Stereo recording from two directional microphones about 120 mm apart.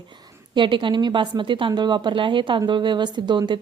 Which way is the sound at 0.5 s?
45° right (ahead or behind).